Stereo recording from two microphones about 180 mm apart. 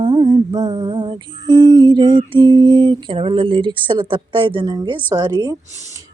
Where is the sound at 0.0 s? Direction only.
25° right (ahead or behind).